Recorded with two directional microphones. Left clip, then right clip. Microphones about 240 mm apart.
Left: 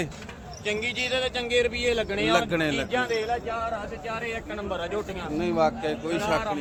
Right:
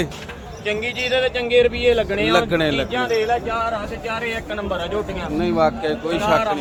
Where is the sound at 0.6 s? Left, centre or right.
Left.